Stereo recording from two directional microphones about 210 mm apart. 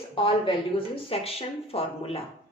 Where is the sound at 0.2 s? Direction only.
25° left (ahead or behind).